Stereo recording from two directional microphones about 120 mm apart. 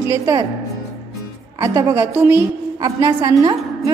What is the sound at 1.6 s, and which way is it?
Speech, 30° right (ahead or behind).